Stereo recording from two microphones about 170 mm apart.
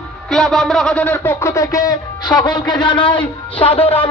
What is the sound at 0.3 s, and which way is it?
Speech, centre (ahead or behind).